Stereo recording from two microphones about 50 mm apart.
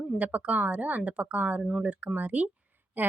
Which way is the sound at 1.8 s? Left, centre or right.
Right.